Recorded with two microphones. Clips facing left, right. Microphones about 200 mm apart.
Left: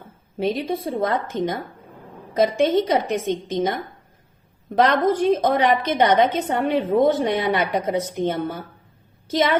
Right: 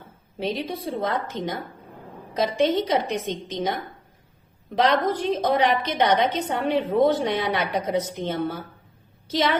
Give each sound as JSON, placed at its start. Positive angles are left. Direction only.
{"t": 0.3, "sound": "a woman's voice", "side_deg": 50}
{"t": 4.7, "sound": "a woman's voice", "side_deg": 50}